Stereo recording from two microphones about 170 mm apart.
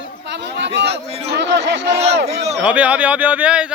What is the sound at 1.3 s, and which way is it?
Chatter, 90° right.